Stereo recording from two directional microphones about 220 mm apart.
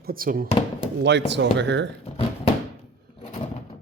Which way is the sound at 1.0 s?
50° right (ahead or behind).